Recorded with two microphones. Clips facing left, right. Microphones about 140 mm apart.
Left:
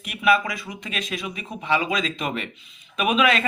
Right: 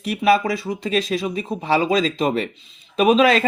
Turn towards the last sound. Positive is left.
turn(degrees=-35)  # may be behind; listen again after turning